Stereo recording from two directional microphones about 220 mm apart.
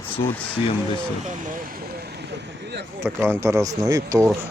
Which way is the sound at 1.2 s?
40° right (ahead or behind).